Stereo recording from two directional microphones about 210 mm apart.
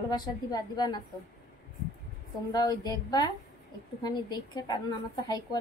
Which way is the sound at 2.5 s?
20° left (ahead or behind).